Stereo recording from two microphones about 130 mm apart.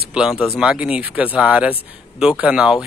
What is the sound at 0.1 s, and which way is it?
A man's voice, 5° right (ahead or behind).